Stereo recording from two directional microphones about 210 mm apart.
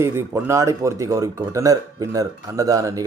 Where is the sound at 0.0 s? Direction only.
10° right (ahead or behind).